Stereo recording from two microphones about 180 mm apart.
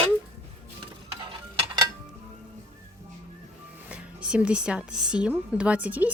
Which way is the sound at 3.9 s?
5° right (ahead or behind).